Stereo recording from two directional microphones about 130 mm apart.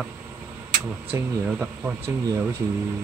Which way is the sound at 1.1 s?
15° right (ahead or behind).